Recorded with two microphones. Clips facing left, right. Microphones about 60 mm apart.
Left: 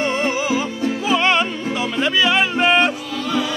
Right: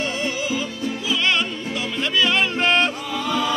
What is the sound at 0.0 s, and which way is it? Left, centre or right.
Music, left.